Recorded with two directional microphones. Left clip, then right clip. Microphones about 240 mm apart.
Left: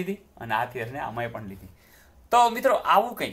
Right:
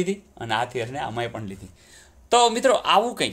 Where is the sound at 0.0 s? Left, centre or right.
Right.